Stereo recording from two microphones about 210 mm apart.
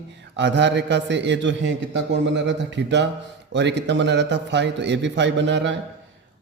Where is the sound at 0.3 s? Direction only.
60° right (ahead or behind).